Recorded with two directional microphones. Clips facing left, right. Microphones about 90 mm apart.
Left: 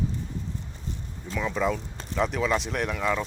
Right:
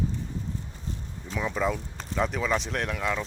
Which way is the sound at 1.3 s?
5° right (ahead or behind).